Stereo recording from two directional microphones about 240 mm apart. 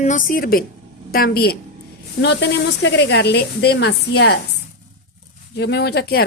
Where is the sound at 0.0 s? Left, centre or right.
Left.